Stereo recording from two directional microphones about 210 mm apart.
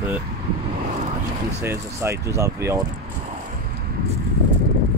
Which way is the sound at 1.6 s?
10° right (ahead or behind).